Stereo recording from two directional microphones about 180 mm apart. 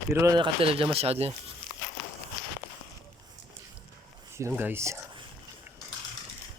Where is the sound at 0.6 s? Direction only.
30° right (ahead or behind).